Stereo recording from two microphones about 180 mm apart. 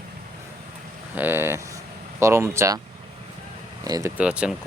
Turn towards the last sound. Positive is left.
turn(degrees=-5)  # may be behind; listen again after turning